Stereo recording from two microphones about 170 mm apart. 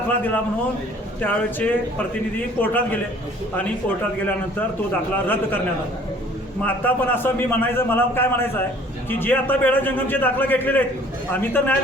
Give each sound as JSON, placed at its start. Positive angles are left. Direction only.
{"t": 1.2, "sound": "a man's voice", "side_deg": 10}
{"t": 6.7, "sound": "a man's voice", "side_deg": 10}